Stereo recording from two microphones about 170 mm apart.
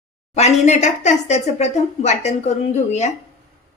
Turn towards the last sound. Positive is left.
turn(degrees=40)  # may be behind; listen again after turning